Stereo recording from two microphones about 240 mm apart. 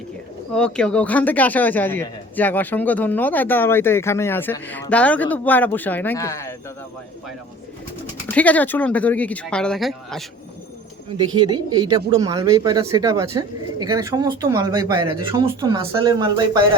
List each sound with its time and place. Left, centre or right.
0.5 s speech: centre
8.3 s speech: centre
11.5 s speech: centre